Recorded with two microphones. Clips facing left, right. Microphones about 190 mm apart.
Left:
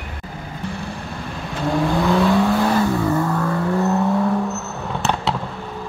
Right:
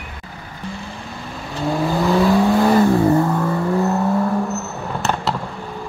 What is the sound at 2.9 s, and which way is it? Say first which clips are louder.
Vehicle: right 5 dB; 30° right (ahead or behind).